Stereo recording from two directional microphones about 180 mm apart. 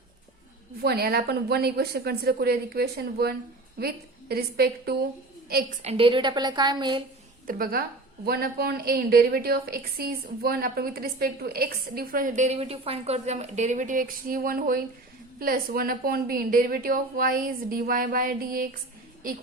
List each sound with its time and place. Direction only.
0.8 s a woman's voice: 60° right (ahead or behind)
5.8 s a woman's voice: 35° right (ahead or behind)
7.4 s a woman's voice: 55° right (ahead or behind)